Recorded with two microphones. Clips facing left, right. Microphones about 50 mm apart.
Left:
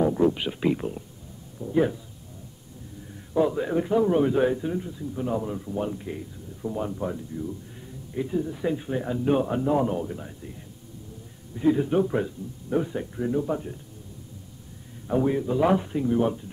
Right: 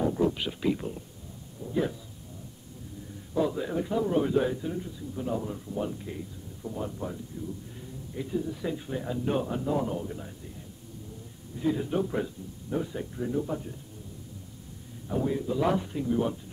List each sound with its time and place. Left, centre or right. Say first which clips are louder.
0.0 s speech: left 5 dB; centre
3.3 s speech: left 5 dB; left
10.0 s speech: left 3 dB; centre
11.5 s speech: left 6 dB; left
15.0 s speech: left 5 dB; left